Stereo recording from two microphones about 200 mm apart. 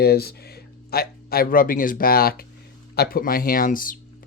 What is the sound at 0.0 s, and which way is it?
Speech, 50° left (ahead or behind).